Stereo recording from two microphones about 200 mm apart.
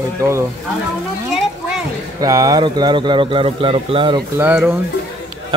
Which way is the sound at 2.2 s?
15° right (ahead or behind).